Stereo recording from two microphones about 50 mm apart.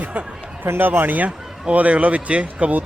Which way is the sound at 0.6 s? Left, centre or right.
Right.